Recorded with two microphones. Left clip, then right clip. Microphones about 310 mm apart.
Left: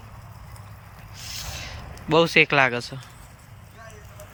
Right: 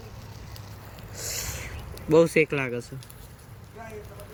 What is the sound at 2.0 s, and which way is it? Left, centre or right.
Speech, centre.